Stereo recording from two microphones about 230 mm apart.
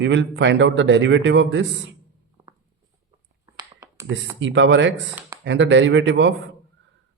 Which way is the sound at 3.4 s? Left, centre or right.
Centre.